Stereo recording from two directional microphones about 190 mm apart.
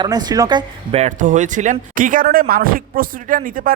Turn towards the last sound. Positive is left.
turn(degrees=-45)  # may be behind; listen again after turning